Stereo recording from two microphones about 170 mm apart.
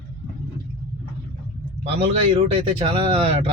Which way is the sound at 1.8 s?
35° right (ahead or behind).